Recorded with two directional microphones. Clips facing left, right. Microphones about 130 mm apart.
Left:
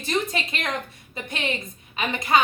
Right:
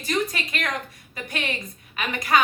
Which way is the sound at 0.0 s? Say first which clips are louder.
Even; 25° left (ahead or behind).